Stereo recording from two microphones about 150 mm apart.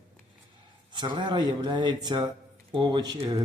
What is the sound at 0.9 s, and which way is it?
Speech, 30° right (ahead or behind).